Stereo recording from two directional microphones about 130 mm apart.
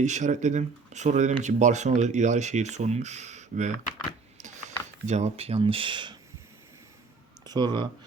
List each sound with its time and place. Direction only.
0.0 s speech: 65° right (ahead or behind); by 6.1 s 40° right (ahead or behind)
7.4 s speech: 35° right (ahead or behind)